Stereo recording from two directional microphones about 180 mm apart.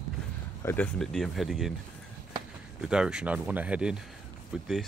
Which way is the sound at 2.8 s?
5° right (ahead or behind).